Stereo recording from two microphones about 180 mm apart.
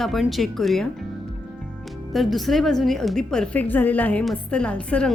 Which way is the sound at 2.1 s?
Centre (ahead or behind).